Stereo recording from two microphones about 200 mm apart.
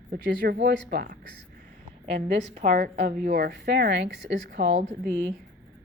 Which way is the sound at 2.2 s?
40° right (ahead or behind).